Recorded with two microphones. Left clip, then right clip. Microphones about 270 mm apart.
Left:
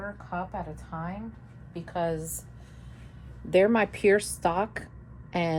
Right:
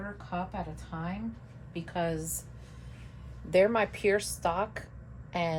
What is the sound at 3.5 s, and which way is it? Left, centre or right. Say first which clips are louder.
Speech: left 2 dB; left.